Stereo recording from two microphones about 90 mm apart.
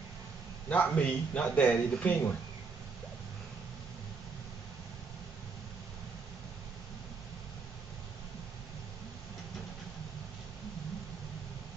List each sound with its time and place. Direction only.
0.7 s a man's voice: 15° left (ahead or behind)